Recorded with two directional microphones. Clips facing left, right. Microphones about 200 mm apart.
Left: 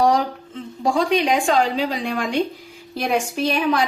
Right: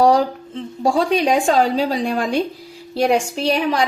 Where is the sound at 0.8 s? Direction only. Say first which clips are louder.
Right 2 dB; 35° right (ahead or behind).